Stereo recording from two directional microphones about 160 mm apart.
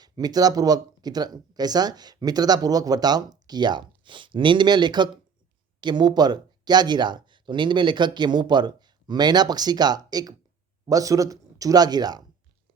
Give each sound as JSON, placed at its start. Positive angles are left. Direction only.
{"t": 0.0, "sound": "speech", "side_deg": -25}